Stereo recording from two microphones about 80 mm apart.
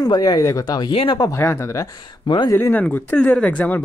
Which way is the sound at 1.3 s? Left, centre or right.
Left.